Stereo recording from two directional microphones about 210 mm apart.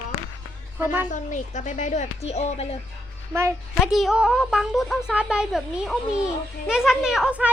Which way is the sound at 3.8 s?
Centre (ahead or behind).